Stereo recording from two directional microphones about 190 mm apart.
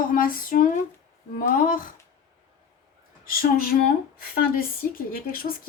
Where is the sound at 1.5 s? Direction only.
45° left (ahead or behind).